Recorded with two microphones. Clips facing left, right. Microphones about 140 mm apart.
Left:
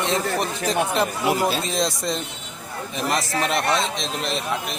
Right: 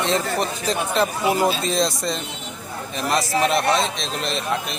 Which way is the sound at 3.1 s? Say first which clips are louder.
Right 4 dB; 20° right (ahead or behind).